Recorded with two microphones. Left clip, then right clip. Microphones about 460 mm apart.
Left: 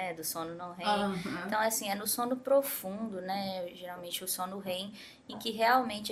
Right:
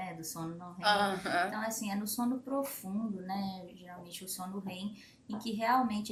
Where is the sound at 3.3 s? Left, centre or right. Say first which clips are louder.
Left 5 dB; left.